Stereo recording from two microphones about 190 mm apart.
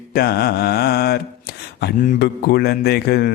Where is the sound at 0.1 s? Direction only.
55° left (ahead or behind).